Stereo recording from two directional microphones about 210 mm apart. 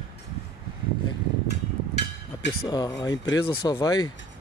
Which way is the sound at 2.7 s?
20° left (ahead or behind).